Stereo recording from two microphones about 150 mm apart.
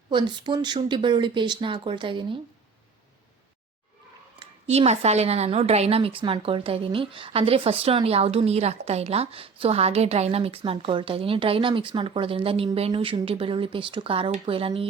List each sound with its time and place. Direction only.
0.1 s a woman's voice: 30° right (ahead or behind)
4.4 s a woman's voice: 40° right (ahead or behind)